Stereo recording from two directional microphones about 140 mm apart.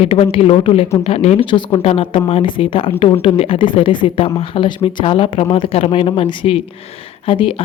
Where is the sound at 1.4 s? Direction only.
35° left (ahead or behind).